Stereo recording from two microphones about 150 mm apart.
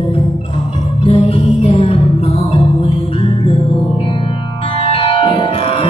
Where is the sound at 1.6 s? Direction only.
35° left (ahead or behind).